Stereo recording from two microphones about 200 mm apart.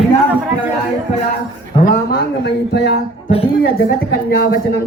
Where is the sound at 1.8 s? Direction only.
45° left (ahead or behind).